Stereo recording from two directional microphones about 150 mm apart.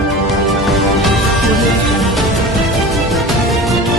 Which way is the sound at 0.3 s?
Centre (ahead or behind).